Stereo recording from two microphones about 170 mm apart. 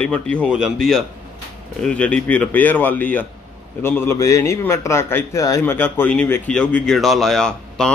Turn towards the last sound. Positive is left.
turn(degrees=5)  # may be behind; listen again after turning